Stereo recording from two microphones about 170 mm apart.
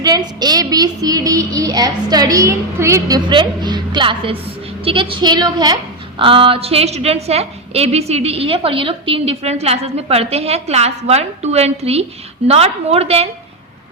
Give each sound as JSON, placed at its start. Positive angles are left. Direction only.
{"t": 0.0, "sound": "a woman's voice", "side_deg": -25}